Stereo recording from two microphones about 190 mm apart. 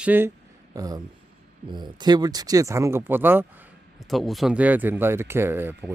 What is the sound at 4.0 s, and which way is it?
Speech, centre (ahead or behind).